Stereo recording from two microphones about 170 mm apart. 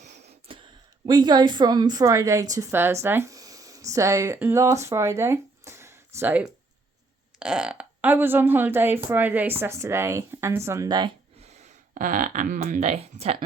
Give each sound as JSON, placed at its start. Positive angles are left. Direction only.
{"t": 0.0, "sound": "a sound", "side_deg": -40}
{"t": 1.0, "sound": "a woman's voice", "side_deg": -25}
{"t": 11.4, "sound": "speech", "side_deg": -40}